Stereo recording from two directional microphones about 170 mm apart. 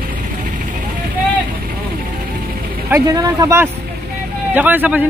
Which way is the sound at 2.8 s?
15° right (ahead or behind).